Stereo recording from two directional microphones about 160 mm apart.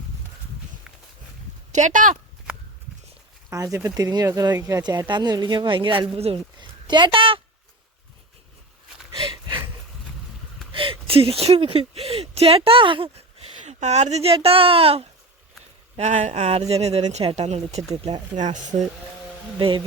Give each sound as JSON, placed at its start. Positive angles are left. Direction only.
{"t": 1.7, "sound": "speech", "side_deg": -50}
{"t": 3.5, "sound": "speech", "side_deg": -20}
{"t": 9.1, "sound": "a sound", "side_deg": -30}
{"t": 10.7, "sound": "speech", "side_deg": -35}
{"t": 13.7, "sound": "speech", "side_deg": -45}
{"t": 16.0, "sound": "speech", "side_deg": -45}
{"t": 19.5, "sound": "speech", "side_deg": -30}